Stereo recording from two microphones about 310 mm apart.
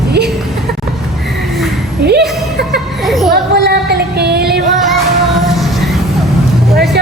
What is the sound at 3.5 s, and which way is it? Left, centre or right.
Music, right.